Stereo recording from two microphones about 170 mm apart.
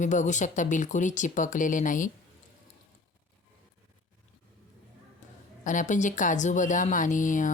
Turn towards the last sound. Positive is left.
turn(degrees=50)  # may be behind; listen again after turning